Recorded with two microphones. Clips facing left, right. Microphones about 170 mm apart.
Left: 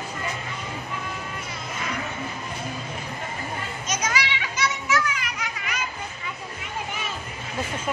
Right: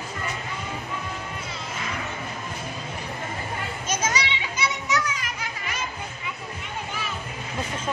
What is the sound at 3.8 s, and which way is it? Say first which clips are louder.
Children playing: right 1 dB; 25° right (ahead or behind).